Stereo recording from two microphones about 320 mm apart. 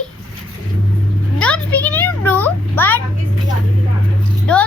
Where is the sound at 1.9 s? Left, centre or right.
Centre.